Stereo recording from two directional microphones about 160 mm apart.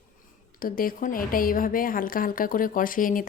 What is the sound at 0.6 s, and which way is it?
A woman's voice, 60° left (ahead or behind).